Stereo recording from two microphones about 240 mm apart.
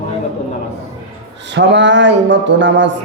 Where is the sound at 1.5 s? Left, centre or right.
Right.